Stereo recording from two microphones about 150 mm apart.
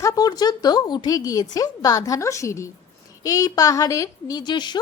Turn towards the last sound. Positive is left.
turn(degrees=30)  # may be behind; listen again after turning